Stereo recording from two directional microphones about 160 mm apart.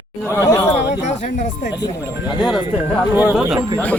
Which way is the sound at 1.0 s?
45° left (ahead or behind).